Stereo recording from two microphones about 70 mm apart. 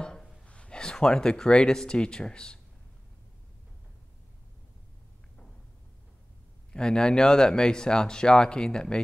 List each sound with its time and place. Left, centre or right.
0.0 s speech: centre
6.7 s speech: centre